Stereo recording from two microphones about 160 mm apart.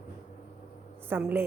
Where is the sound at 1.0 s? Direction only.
10° right (ahead or behind).